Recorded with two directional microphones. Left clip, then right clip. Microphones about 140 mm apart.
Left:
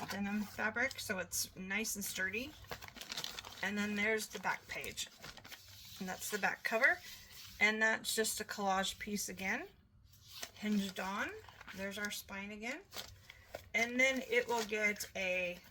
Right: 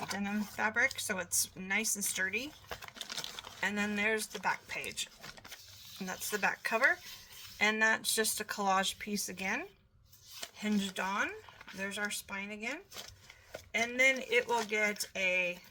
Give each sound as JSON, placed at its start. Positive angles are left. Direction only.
{"t": 0.0, "sound": "speech", "side_deg": -35}
{"t": 3.6, "sound": "speech", "side_deg": -35}
{"t": 10.3, "sound": "a sound", "side_deg": -35}
{"t": 10.9, "sound": "speech", "side_deg": -45}